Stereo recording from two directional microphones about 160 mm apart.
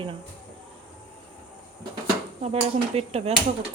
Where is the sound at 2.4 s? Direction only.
40° right (ahead or behind).